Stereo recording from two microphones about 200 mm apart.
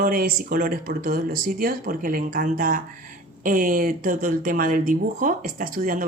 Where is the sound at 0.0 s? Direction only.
50° right (ahead or behind).